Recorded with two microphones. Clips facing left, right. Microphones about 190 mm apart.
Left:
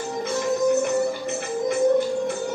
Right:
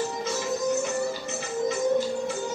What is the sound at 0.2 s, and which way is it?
Music, 60° left (ahead or behind).